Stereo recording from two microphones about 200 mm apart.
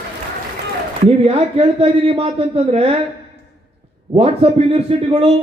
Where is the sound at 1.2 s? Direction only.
30° right (ahead or behind).